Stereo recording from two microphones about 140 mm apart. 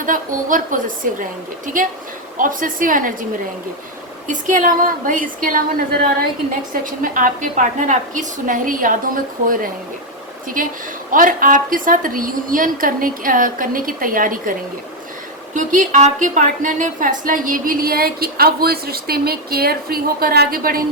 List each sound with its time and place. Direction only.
0.0 s a woman's voice: 70° right (ahead or behind)
4.3 s a woman's voice: 65° right (ahead or behind); by 6.1 s 85° right
6.5 s a woman's voice: 70° right (ahead or behind)
10.6 s a woman's voice: 75° right (ahead or behind)
15.5 s a woman's voice: 65° right (ahead or behind); by 20.8 s 90° right